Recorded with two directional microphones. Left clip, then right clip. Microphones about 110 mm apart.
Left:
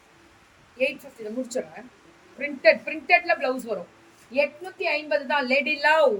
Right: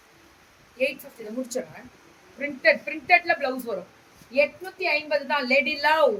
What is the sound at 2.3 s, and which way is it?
A woman's voice, 20° right (ahead or behind).